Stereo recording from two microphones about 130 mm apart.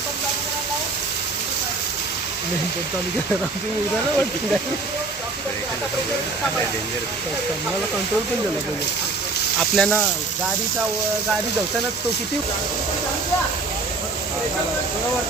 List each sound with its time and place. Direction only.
9.6 s speech: centre (ahead or behind)